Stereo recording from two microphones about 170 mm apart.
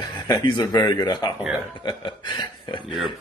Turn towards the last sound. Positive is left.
turn(degrees=0)  # may be behind; listen again after turning